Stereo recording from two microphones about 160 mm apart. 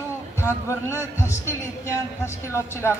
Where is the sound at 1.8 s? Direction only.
15° left (ahead or behind).